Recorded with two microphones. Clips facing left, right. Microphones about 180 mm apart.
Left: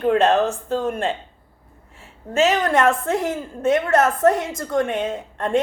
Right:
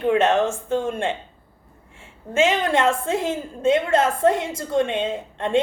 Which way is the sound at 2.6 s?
25° right (ahead or behind).